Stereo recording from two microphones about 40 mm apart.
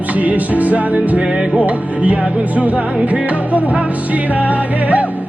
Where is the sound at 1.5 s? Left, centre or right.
Right.